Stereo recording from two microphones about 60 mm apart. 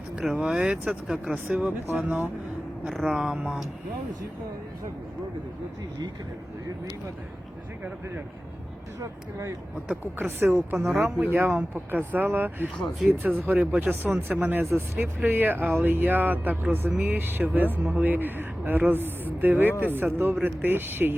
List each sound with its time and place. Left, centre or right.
0.3 s speech: centre
0.9 s speech: centre
1.2 s speech: right
2.8 s speech: centre
10.2 s speech: right
12.7 s speech: centre
13.1 s speech: right